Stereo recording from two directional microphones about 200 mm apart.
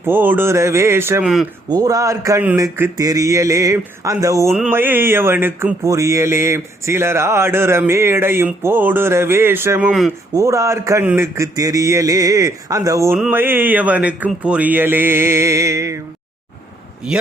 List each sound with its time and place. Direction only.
0.0 s speech: 10° right (ahead or behind)